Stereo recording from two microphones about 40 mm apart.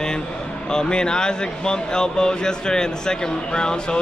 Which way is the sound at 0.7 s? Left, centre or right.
Centre.